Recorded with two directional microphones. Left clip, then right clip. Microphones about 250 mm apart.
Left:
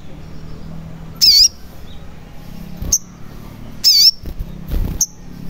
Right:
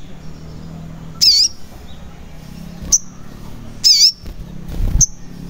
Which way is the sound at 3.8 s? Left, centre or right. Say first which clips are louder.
Even; centre.